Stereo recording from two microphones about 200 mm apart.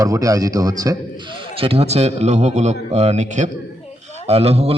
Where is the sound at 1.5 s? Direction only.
30° right (ahead or behind).